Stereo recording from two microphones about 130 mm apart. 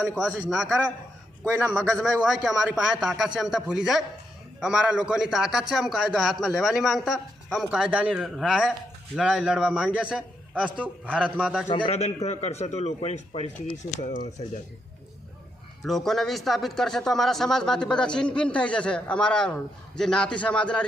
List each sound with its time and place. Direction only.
0.2 s a man's voice: 5° right (ahead or behind)
11.7 s a man's voice: 40° left (ahead or behind)
11.9 s a man's voice: 55° left (ahead or behind)
13.9 s speech: 70° left (ahead or behind)
15.8 s a man's voice: centre (ahead or behind)